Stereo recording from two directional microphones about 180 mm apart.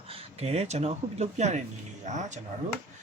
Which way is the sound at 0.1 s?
35° right (ahead or behind).